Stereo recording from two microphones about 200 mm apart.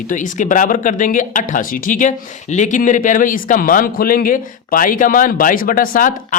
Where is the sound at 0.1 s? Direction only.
40° left (ahead or behind).